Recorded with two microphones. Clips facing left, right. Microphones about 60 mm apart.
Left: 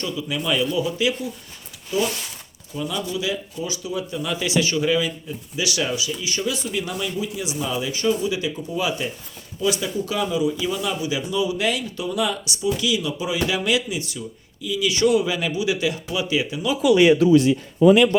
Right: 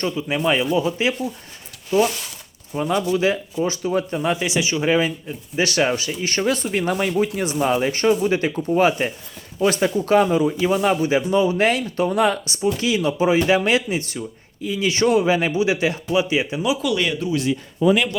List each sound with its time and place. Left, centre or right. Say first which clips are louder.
0.0 s speech: right 5 dB; right
2.7 s speech: right 6 dB; right
4.9 s speech: right 3 dB; right
16.8 s speech: left 7 dB; centre